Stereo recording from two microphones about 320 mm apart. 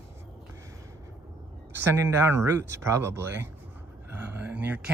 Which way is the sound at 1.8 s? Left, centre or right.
Centre.